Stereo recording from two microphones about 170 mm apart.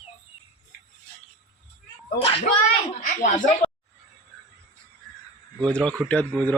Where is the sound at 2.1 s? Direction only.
35° left (ahead or behind).